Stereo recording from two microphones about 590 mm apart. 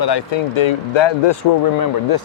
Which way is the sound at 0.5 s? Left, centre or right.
Left.